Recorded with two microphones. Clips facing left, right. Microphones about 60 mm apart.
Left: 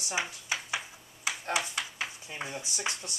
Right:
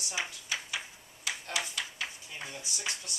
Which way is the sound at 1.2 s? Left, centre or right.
Left.